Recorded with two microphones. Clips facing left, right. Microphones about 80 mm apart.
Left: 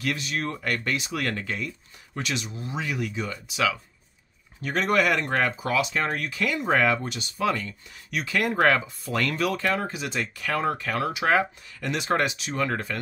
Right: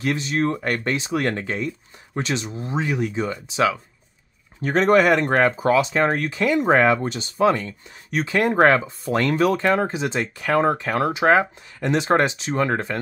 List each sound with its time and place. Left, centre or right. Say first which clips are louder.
0.0 s speech: right 7 dB; right